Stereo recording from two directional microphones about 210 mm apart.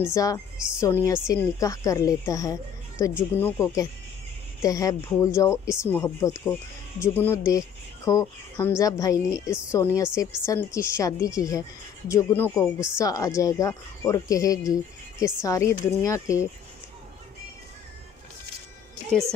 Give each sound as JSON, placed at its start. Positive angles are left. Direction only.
{"t": 0.0, "sound": "speech", "side_deg": 15}
{"t": 19.1, "sound": "a woman's voice", "side_deg": 5}